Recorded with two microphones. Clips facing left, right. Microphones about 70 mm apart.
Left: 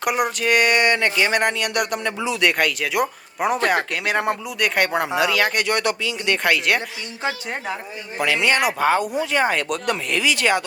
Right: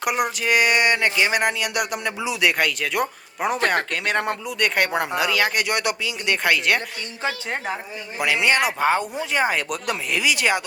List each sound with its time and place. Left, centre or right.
0.0 s speech: centre
5.6 s speech: centre
8.2 s speech: centre
9.3 s speech: centre